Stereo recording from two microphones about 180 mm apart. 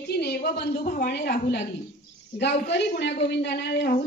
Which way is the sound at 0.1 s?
60° left (ahead or behind).